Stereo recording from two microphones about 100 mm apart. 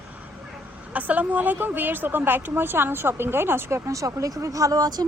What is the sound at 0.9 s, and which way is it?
A woman's voice, 15° right (ahead or behind).